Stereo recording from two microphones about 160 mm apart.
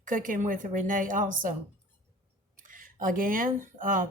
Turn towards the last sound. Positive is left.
turn(degrees=-55)  # may be behind; listen again after turning